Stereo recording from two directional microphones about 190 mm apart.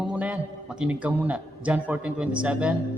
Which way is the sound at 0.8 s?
5° right (ahead or behind).